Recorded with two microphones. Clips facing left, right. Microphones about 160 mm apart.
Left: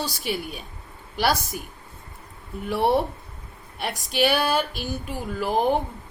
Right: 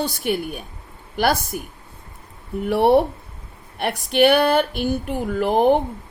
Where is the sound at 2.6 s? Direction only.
60° right (ahead or behind).